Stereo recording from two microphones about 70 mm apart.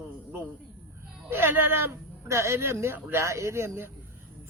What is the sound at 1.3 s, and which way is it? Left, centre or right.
Speech, right.